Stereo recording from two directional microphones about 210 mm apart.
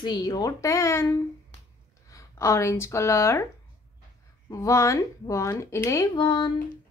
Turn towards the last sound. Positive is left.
turn(degrees=20)  # may be behind; listen again after turning